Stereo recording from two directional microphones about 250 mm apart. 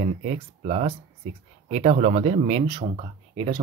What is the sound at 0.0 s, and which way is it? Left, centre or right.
Speech, right.